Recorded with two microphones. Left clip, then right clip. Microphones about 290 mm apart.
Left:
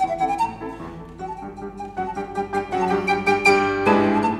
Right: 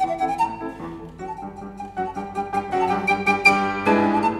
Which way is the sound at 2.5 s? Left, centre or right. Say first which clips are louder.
Right 1 dB; right.